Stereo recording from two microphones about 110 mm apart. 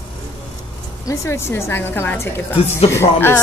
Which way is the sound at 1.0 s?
25° left (ahead or behind).